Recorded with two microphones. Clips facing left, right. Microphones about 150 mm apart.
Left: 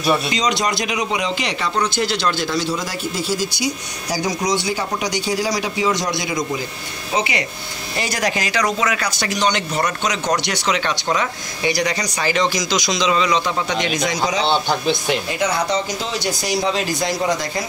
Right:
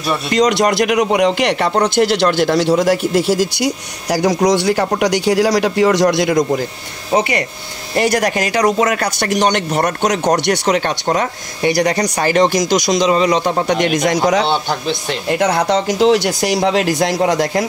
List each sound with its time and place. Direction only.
0.3 s a man's voice: 60° right (ahead or behind)
7.1 s speech: 45° right (ahead or behind)
7.9 s speech: 60° right (ahead or behind)
15.2 s a man's voice: 65° right (ahead or behind)